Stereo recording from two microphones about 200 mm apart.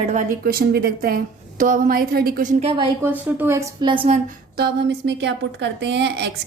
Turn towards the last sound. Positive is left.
turn(degrees=-60)  # may be behind; listen again after turning